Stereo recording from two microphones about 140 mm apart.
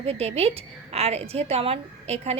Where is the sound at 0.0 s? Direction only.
45° right (ahead or behind).